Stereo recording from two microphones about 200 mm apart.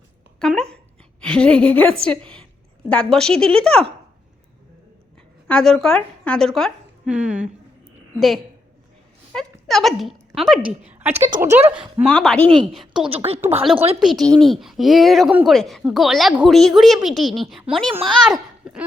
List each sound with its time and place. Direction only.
0.3 s speech: 5° left (ahead or behind)
5.5 s a woman's voice: 5° left (ahead or behind)
9.3 s speech: centre (ahead or behind)
11.1 s speech: 35° right (ahead or behind)
11.9 s speech: 5° left (ahead or behind)
13.1 s speech: 30° right (ahead or behind)
14.0 s a child's voice: centre (ahead or behind)